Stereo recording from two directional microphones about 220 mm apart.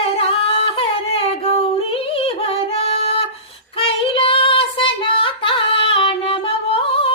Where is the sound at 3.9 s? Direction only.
25° left (ahead or behind).